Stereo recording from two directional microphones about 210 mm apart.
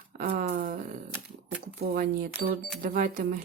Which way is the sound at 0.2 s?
40° right (ahead or behind).